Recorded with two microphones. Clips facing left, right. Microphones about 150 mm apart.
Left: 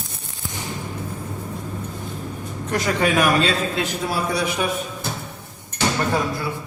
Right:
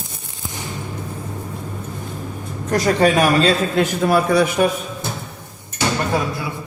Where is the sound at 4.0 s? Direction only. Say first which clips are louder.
Right 10 dB; 60° right (ahead or behind).